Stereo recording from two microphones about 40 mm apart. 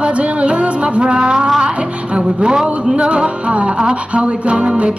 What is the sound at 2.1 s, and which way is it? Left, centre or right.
Speech, centre.